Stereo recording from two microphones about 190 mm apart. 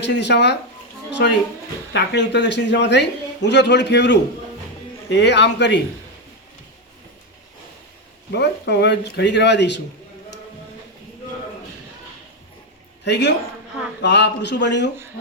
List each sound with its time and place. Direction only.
0.0 s a man's voice: 65° left (ahead or behind)
1.9 s a man's voice: 65° left (ahead or behind)
8.3 s a man's voice: 65° left (ahead or behind)
13.1 s a man's voice: 65° left (ahead or behind)